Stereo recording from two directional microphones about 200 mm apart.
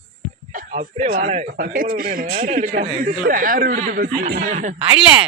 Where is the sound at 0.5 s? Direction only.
40° right (ahead or behind).